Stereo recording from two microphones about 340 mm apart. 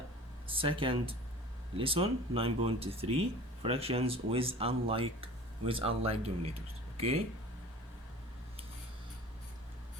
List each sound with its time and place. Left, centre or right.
0.4 s speech: centre